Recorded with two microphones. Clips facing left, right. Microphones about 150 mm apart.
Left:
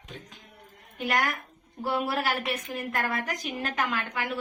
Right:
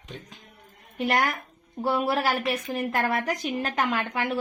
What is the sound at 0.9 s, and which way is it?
A woman's voice, 30° right (ahead or behind).